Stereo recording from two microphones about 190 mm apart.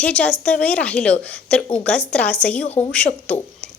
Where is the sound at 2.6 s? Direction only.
35° left (ahead or behind).